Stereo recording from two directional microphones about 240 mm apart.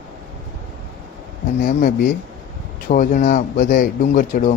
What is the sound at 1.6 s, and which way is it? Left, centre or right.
Speech, left.